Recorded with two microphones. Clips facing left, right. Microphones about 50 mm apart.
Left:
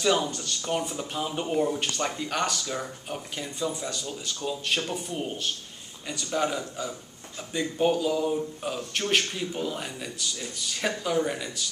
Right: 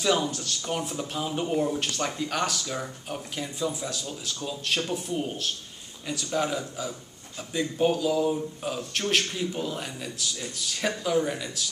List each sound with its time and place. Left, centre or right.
0.0 s speech: centre